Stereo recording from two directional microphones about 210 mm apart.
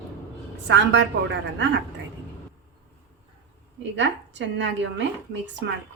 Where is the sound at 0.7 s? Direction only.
60° right (ahead or behind).